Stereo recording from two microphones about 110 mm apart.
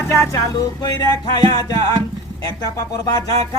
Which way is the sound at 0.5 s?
40° left (ahead or behind).